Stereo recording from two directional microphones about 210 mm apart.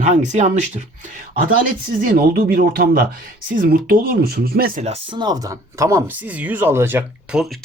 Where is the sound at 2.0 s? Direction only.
45° right (ahead or behind).